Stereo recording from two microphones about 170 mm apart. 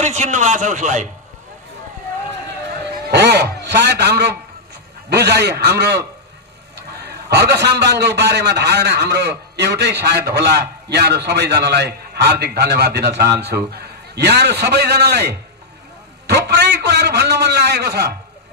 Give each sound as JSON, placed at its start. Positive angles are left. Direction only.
{"t": 0.0, "sound": "a man's voice", "side_deg": -40}
{"t": 3.1, "sound": "a man's voice", "side_deg": -75}